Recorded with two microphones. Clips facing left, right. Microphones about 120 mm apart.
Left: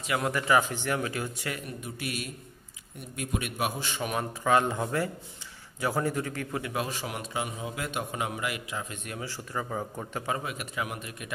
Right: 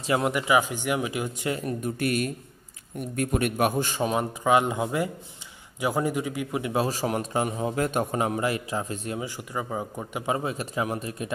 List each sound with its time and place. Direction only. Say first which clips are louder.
0.0 s speech: right 5 dB; 30° right (ahead or behind)
0.3 s speech: right 2 dB; 15° right (ahead or behind)
1.6 s a man's voice: right 10 dB; 45° right (ahead or behind)
4.0 s speech: right 3 dB; 20° right (ahead or behind)
6.7 s a man's voice: right 7 dB; 35° right (ahead or behind)
9.2 s speech: right 3 dB; 15° right (ahead or behind)
10.3 s a man's voice: right 7 dB; 30° right (ahead or behind)